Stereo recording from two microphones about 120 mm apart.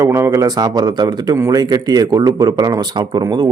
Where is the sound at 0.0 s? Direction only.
25° right (ahead or behind).